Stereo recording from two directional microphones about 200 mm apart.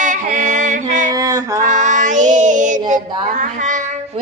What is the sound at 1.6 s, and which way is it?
Child singing, 40° right (ahead or behind).